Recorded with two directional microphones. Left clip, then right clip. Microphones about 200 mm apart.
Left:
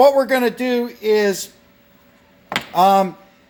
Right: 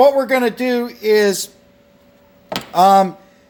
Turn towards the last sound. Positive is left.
turn(degrees=0)  # may be behind; listen again after turning